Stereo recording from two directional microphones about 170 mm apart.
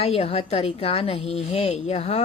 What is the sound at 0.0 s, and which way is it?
A woman's voice, 35° left (ahead or behind).